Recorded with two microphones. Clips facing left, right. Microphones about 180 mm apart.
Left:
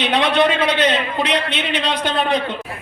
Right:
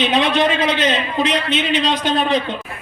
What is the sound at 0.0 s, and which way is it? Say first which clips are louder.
A man's voice: even; 65° left (ahead or behind).